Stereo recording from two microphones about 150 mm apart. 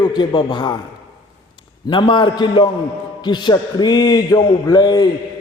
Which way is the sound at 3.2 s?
30° left (ahead or behind).